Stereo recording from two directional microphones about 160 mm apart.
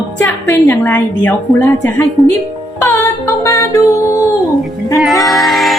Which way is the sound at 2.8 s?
20° left (ahead or behind).